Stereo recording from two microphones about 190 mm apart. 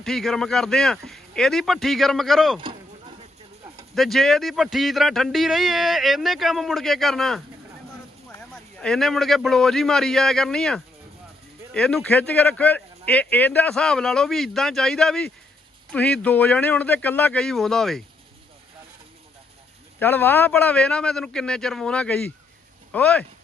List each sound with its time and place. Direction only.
0.0 s speech: centre (ahead or behind)
2.6 s a sound: 25° right (ahead or behind)
3.9 s speech: centre (ahead or behind)
8.8 s speech: centre (ahead or behind)
20.0 s speech: 10° left (ahead or behind)